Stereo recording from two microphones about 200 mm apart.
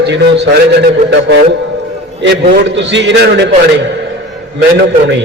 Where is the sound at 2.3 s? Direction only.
55° right (ahead or behind).